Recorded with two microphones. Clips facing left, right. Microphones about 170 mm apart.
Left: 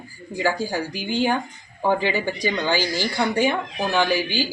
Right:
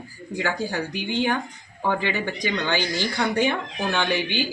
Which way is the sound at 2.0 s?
10° left (ahead or behind).